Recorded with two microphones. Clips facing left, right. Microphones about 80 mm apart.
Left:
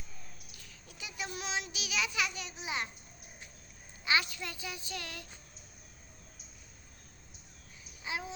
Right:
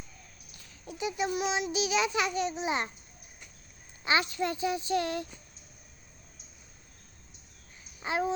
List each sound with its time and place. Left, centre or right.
0.9 s a child's voice: right
4.0 s a woman's voice: right
8.0 s babbling: right